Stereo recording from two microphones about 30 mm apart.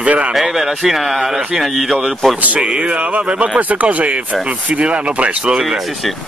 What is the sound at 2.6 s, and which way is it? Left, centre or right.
Speech, right.